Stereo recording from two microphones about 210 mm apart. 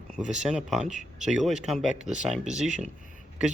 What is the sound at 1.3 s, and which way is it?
Speech, centre (ahead or behind).